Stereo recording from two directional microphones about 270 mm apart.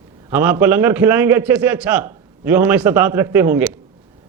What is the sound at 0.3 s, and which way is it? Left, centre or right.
A man's voice, centre.